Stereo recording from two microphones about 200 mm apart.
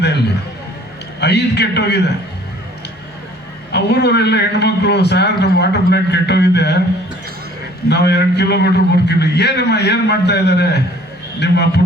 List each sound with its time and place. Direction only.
1.2 s a man's voice: 55° left (ahead or behind)
3.7 s a man's voice: 55° left (ahead or behind)
7.9 s a man's voice: 55° left (ahead or behind)